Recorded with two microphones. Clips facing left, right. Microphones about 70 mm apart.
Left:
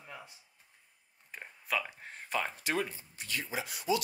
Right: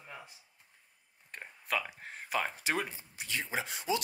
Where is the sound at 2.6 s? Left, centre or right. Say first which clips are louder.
Even; centre.